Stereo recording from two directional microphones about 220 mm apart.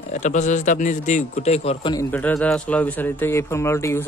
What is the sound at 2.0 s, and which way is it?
A man's voice, 5° left (ahead or behind).